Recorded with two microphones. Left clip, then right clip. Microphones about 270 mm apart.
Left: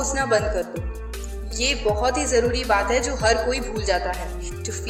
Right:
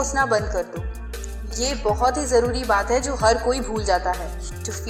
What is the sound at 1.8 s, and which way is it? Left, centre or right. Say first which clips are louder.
Speech: right 4 dB; centre.